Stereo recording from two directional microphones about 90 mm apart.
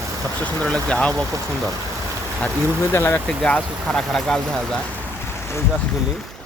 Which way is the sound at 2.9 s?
25° left (ahead or behind).